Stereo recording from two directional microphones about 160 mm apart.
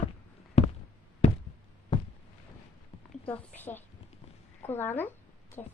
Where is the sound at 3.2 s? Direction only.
10° left (ahead or behind).